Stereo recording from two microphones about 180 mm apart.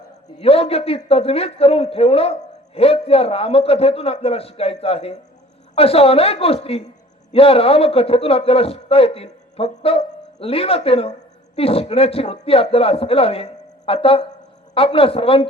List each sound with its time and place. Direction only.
0.3 s a man's voice: 30° left (ahead or behind)